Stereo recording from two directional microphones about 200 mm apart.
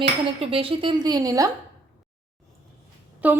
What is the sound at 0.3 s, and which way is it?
A woman's voice, 25° right (ahead or behind).